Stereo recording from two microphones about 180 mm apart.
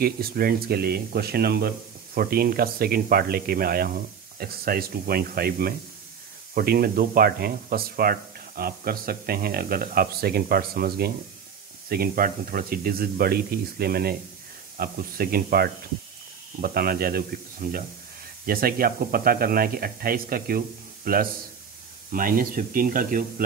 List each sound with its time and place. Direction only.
0.0 s speech: 55° right (ahead or behind)